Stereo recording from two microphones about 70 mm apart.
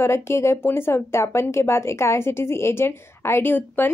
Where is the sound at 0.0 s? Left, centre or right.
Left.